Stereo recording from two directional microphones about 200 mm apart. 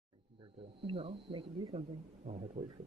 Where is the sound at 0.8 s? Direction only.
25° right (ahead or behind).